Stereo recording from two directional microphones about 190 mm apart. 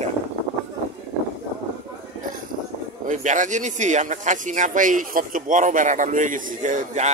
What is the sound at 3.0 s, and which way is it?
Speech, 40° right (ahead or behind).